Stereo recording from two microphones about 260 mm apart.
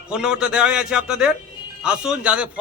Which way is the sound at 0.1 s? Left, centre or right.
Centre.